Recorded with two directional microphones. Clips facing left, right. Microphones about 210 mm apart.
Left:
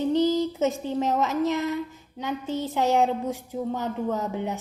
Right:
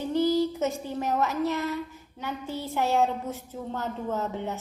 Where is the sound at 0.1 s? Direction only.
20° left (ahead or behind).